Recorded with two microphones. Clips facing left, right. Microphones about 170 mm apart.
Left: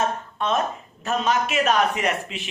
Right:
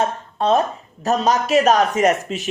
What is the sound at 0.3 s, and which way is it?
A man's voice, 35° right (ahead or behind).